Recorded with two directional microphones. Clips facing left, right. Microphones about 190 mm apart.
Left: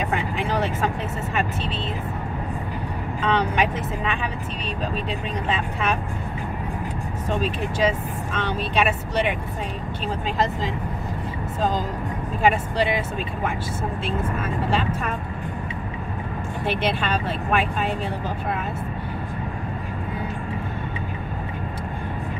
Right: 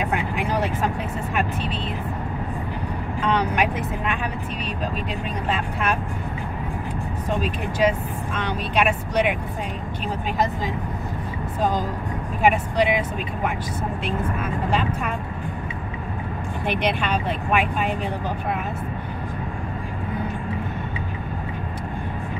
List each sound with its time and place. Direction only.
0.0 s speech: 10° right (ahead or behind)
3.3 s speech: 10° right (ahead or behind)
7.4 s speech: 10° right (ahead or behind)
12.4 s speech: 15° right (ahead or behind)
16.6 s speech: 15° right (ahead or behind)